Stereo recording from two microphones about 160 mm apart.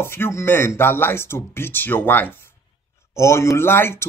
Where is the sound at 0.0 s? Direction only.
15° left (ahead or behind).